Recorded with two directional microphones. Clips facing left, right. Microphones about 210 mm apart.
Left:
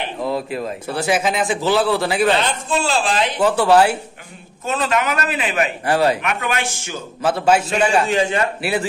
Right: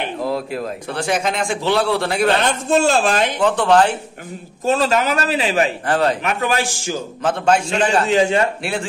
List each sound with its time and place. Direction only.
0.2 s a man's voice: centre (ahead or behind)
2.4 s a woman's voice: 45° right (ahead or behind)
3.3 s a man's voice: 5° left (ahead or behind)
4.6 s a man's voice: 35° right (ahead or behind)
5.9 s a man's voice: 10° left (ahead or behind)
6.2 s a man's voice: 35° right (ahead or behind)
7.2 s a man's voice: 5° left (ahead or behind)
8.1 s a man's voice: 25° right (ahead or behind)